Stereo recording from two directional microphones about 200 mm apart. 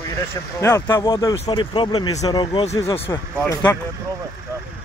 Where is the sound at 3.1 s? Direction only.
10° left (ahead or behind).